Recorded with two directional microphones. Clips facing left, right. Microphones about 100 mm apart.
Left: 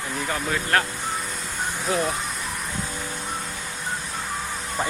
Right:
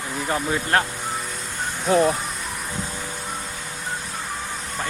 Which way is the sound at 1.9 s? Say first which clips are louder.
Right 8 dB; 35° right (ahead or behind).